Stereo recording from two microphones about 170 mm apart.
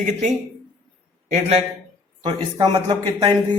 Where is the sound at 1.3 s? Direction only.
40° right (ahead or behind).